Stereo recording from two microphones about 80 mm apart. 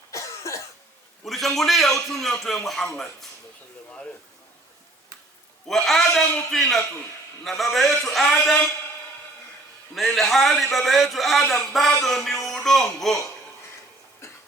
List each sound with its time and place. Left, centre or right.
0.1 s cough: left
1.2 s a man's voice: centre
5.6 s a man's voice: centre
9.9 s a man's voice: centre